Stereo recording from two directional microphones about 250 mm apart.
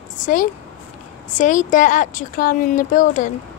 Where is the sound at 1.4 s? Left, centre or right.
Left.